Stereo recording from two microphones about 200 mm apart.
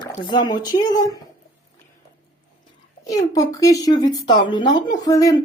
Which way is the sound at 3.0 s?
15° left (ahead or behind).